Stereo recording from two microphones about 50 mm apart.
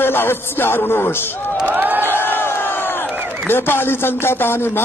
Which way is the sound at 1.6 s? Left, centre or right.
Right.